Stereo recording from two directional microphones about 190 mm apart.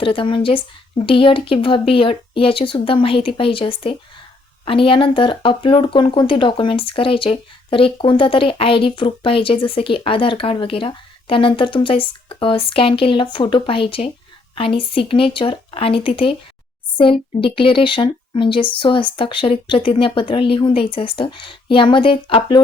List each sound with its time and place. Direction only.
0.0 s speech: 25° left (ahead or behind)